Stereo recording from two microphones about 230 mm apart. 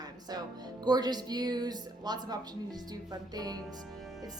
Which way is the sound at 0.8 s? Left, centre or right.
Centre.